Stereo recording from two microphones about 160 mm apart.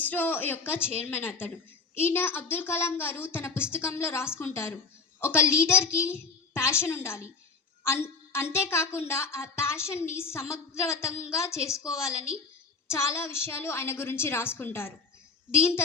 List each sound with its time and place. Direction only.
0.0 s a woman's voice: 10° left (ahead or behind)